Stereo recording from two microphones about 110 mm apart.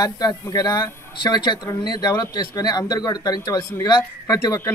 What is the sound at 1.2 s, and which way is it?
Speech, 45° left (ahead or behind).